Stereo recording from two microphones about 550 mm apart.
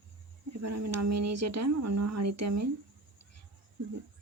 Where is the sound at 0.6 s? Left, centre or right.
Right.